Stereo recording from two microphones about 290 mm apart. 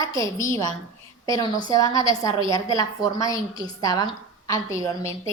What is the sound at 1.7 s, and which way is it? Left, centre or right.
Speech, centre.